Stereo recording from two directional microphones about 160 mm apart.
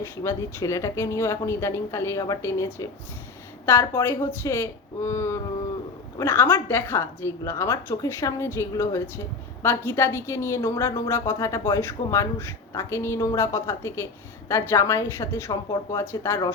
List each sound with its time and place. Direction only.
0.0 s a woman's voice: 20° left (ahead or behind)